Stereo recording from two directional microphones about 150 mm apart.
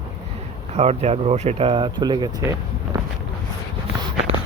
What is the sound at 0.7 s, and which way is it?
Speech, 45° right (ahead or behind).